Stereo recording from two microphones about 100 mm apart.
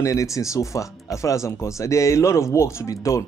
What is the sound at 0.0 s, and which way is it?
Speech, 35° left (ahead or behind).